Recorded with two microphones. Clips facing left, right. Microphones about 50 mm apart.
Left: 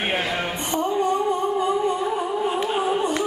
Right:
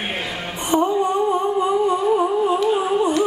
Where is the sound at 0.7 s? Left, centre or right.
Centre.